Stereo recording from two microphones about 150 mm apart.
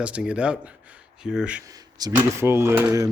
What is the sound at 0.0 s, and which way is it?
Speech, 5° right (ahead or behind).